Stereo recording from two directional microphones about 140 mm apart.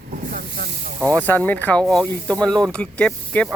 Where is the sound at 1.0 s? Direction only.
10° left (ahead or behind).